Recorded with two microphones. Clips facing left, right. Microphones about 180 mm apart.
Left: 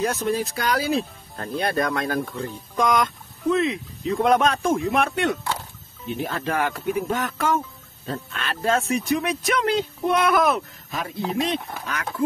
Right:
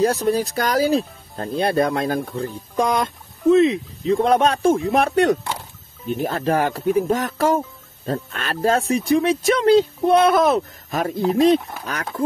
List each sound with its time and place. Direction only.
0.0 s speech: 35° right (ahead or behind)
10.9 s speech: 45° right (ahead or behind)